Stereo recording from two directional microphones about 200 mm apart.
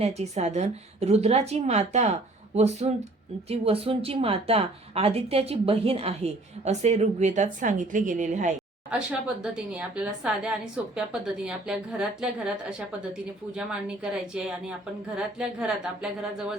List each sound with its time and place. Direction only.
0.0 s a woman's voice: 30° right (ahead or behind)
8.9 s a woman's voice: 5° right (ahead or behind)